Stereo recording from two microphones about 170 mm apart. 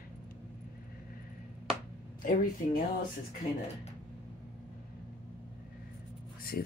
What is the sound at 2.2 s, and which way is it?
Speech, 55° left (ahead or behind).